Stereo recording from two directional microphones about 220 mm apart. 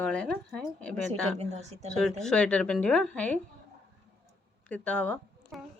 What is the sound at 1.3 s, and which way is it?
Speech, 30° right (ahead or behind).